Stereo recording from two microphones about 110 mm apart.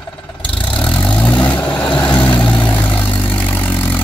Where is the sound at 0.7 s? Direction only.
10° left (ahead or behind).